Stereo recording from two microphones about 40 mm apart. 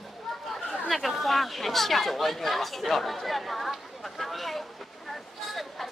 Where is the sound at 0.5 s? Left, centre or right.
Centre.